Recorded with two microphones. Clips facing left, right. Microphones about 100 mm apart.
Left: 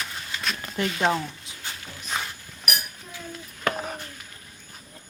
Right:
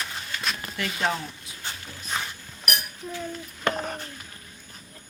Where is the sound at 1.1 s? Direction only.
25° left (ahead or behind).